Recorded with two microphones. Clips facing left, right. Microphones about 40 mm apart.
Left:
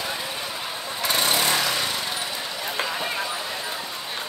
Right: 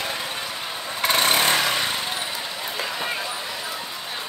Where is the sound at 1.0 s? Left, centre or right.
Right.